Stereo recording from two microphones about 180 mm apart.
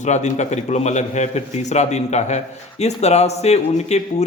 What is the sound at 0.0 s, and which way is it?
A man's voice, 40° left (ahead or behind).